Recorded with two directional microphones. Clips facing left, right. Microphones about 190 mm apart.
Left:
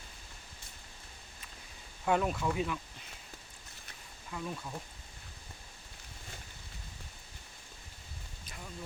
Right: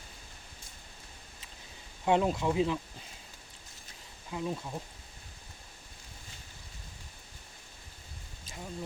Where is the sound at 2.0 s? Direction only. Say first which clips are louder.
Right 3 dB; 25° right (ahead or behind).